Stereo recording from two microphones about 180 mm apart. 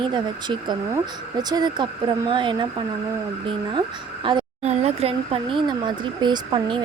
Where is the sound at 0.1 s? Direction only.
25° right (ahead or behind).